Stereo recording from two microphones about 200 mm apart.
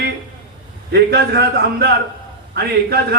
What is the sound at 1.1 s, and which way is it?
A man's voice, 55° right (ahead or behind).